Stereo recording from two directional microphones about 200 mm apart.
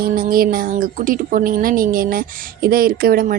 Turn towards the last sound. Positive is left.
turn(degrees=-45)  # may be behind; listen again after turning